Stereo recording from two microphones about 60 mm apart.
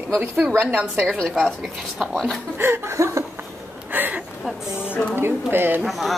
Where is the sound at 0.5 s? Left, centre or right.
Right.